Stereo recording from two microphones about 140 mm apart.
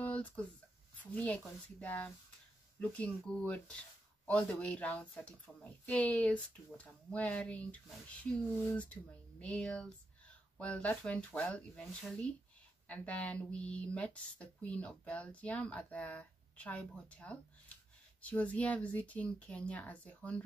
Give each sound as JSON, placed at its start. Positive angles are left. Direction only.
{"t": 0.0, "sound": "a sound", "side_deg": 10}
{"t": 1.1, "sound": "speech", "side_deg": 10}
{"t": 9.4, "sound": "speech", "side_deg": 10}